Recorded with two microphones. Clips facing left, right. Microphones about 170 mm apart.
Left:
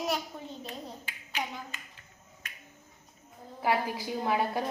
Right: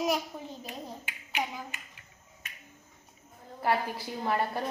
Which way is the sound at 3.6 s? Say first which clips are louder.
Even; centre (ahead or behind).